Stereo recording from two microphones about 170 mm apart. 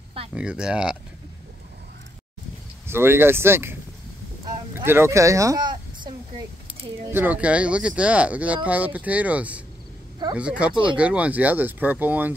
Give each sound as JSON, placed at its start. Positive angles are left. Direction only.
{"t": 0.3, "sound": "speech", "side_deg": -5}
{"t": 2.9, "sound": "speech", "side_deg": -15}
{"t": 4.7, "sound": "speech", "side_deg": -15}
{"t": 7.1, "sound": "speech", "side_deg": -10}